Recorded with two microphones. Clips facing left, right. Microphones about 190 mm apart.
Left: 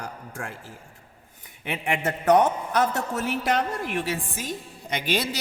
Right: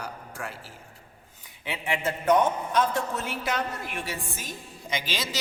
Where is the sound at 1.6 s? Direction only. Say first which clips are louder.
Left 2 dB; 55° left (ahead or behind).